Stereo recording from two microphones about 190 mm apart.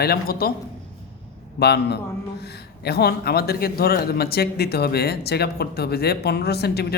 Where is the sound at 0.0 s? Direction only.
55° left (ahead or behind).